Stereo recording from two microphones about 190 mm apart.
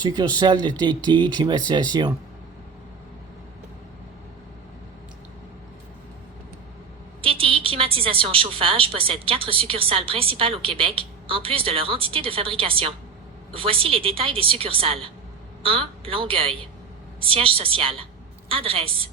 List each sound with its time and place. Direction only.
0.0 s a woman's voice: 20° right (ahead or behind)
7.2 s a woman's voice: 30° right (ahead or behind)